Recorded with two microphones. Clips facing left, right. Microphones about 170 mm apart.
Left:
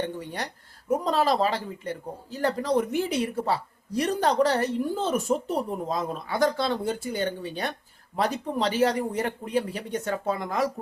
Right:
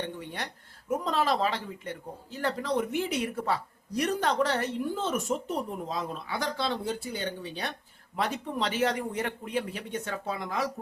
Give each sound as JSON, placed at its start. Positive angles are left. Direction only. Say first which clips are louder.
{"t": 0.0, "sound": "speech", "louder": "left 4 dB", "side_deg": 40}